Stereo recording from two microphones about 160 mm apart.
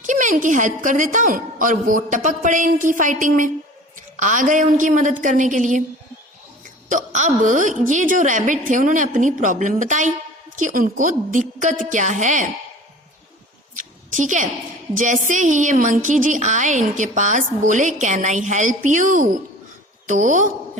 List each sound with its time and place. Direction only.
0.0 s a woman's voice: 50° right (ahead or behind)
6.8 s a woman's voice: 50° right (ahead or behind)
13.7 s a sound: 50° right (ahead or behind)
14.9 s a woman's voice: 50° right (ahead or behind)